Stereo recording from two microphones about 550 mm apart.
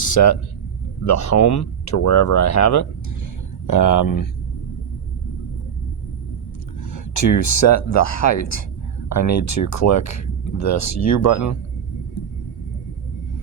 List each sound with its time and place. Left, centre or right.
0.0 s speech: left
6.9 s speech: left